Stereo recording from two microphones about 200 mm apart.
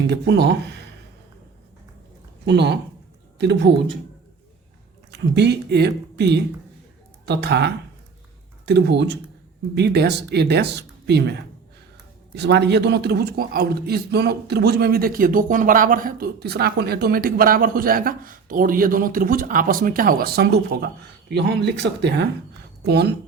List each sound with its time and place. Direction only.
0.1 s speech: 60° right (ahead or behind)
2.5 s speech: 60° right (ahead or behind)
5.1 s speech: 55° right (ahead or behind)